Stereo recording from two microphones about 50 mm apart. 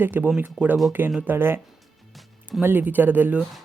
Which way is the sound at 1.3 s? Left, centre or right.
Right.